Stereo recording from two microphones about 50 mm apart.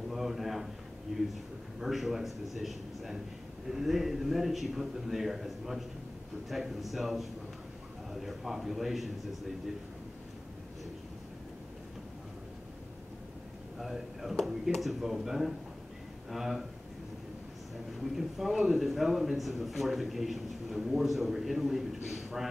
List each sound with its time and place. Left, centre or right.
0.1 s a sound: centre
1.1 s a man's voice: centre
13.7 s a man's voice: centre
18.0 s a man's voice: centre